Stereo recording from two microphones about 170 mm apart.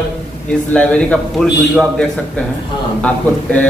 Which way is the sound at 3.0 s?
5° left (ahead or behind).